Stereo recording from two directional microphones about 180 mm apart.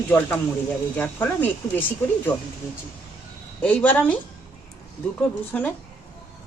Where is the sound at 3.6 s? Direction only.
10° left (ahead or behind).